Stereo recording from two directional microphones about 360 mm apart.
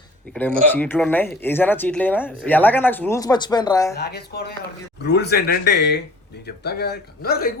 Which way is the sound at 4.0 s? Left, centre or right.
Left.